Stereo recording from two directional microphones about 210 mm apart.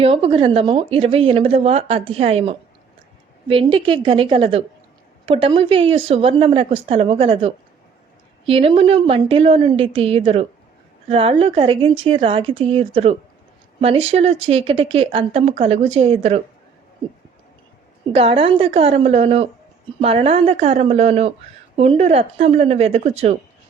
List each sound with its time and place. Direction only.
0.0 s speech: 25° right (ahead or behind)
18.1 s speech: 25° right (ahead or behind)